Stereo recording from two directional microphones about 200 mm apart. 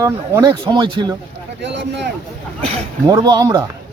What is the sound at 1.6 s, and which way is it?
Speech, 60° right (ahead or behind).